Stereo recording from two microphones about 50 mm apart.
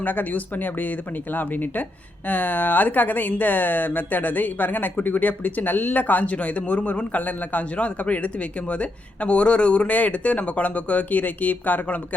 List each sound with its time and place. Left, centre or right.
0.0 s speech: left